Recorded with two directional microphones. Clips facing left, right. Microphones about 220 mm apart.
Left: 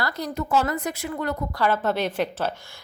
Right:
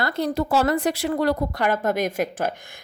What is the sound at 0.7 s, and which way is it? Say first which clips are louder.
Speech: right 6 dB; 90° right.